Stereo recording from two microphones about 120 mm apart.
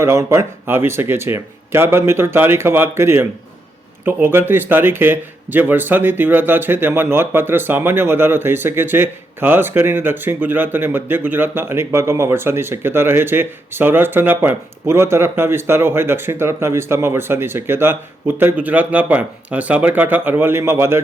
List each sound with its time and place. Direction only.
0.0 s speech: 25° right (ahead or behind)